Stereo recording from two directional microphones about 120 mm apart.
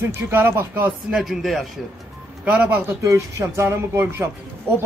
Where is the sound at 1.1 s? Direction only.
Centre (ahead or behind).